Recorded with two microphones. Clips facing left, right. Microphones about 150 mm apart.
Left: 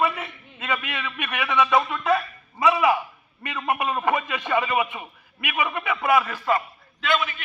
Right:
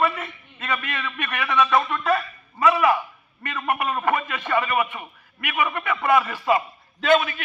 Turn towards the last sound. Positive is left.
turn(degrees=-50)  # may be behind; listen again after turning